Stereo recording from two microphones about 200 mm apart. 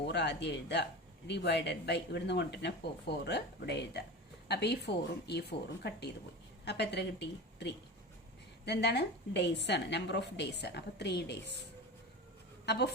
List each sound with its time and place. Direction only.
0.0 s speech: 60° left (ahead or behind)
12.7 s speech: 55° left (ahead or behind)